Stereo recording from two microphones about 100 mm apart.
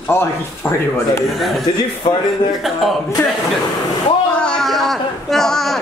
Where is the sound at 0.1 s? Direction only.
25° left (ahead or behind).